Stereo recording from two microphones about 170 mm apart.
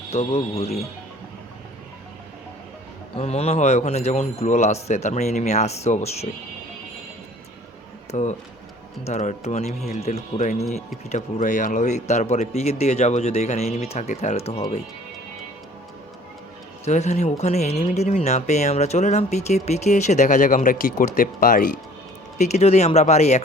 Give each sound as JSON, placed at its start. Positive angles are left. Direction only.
{"t": 0.1, "sound": "speech", "side_deg": 40}
{"t": 3.2, "sound": "speech", "side_deg": 40}
{"t": 8.1, "sound": "speech", "side_deg": 45}
{"t": 16.8, "sound": "speech", "side_deg": 40}
{"t": 22.4, "sound": "speech", "side_deg": 40}